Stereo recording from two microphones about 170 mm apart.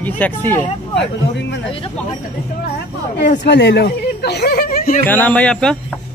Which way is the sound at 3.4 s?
90° left.